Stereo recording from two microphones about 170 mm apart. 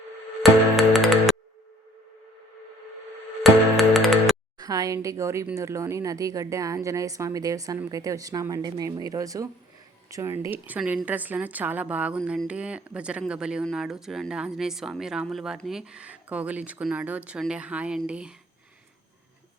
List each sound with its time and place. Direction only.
0.4 s music: centre (ahead or behind)
3.4 s music: centre (ahead or behind)
4.5 s a sound: 20° right (ahead or behind)
5.0 s a woman's voice: 15° right (ahead or behind)